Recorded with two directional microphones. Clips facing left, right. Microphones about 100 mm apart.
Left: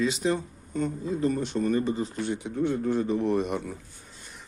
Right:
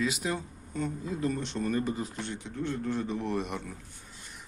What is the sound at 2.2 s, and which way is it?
Speech, 15° left (ahead or behind).